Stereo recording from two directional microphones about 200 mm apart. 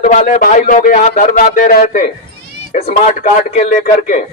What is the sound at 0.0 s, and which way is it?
Speech, 40° left (ahead or behind).